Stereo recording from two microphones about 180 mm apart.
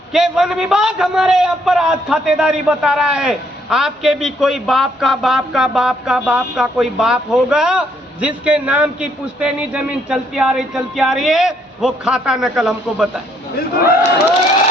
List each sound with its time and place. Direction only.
0.1 s a man's voice: 5° right (ahead or behind)
13.6 s speech: 55° left (ahead or behind)